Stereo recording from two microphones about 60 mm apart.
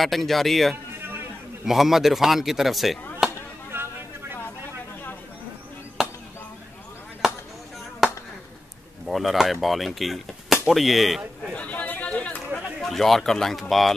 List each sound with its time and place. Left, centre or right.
0.0 s speech: centre
3.7 s music: right
6.0 s chop: centre
7.2 s chop: centre
9.0 s speech: centre
11.5 s a sound: left
12.8 s speech: centre